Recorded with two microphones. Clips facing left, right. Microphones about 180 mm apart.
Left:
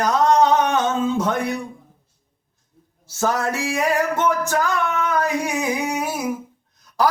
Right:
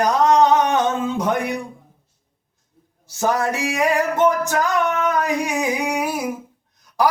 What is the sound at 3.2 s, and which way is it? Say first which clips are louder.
Speech: right 1 dB; 15° right (ahead or behind).